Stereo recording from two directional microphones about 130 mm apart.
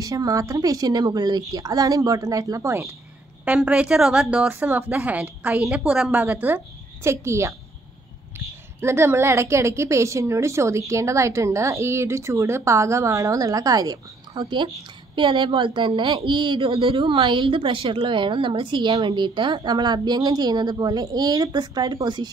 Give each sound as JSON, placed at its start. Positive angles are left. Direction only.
{"t": 0.0, "sound": "a woman's voice", "side_deg": -25}
{"t": 3.4, "sound": "speech", "side_deg": -10}
{"t": 8.8, "sound": "a woman's voice", "side_deg": -20}